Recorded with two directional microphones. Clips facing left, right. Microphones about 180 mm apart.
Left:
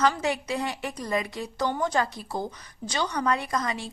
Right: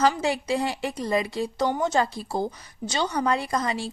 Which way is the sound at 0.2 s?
30° right (ahead or behind).